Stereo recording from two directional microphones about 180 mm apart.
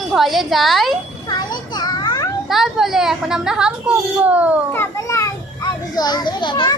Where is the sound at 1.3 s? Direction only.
20° left (ahead or behind).